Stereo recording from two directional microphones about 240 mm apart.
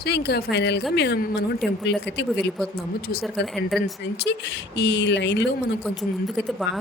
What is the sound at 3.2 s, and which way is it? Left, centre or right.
Speech, centre.